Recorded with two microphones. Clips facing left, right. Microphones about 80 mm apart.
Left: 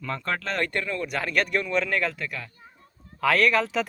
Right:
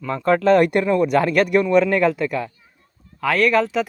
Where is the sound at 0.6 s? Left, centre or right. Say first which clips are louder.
Right 11 dB; centre.